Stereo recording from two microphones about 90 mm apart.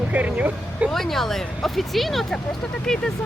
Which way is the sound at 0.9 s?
5° left (ahead or behind).